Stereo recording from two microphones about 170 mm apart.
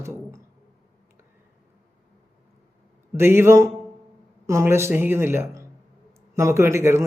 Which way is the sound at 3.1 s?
15° right (ahead or behind).